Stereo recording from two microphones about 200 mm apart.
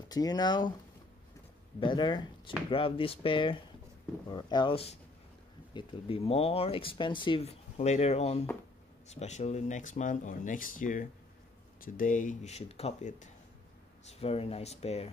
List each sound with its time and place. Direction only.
0.1 s speech: 20° left (ahead or behind)
1.8 s speech: 25° left (ahead or behind)